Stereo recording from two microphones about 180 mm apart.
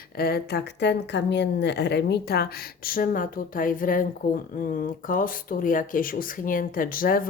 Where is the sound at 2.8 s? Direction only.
55° left (ahead or behind).